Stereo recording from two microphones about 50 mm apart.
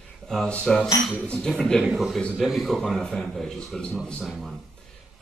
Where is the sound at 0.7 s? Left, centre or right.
Centre.